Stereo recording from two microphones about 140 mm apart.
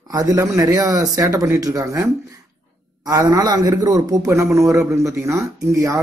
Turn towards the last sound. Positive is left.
turn(degrees=-20)  # may be behind; listen again after turning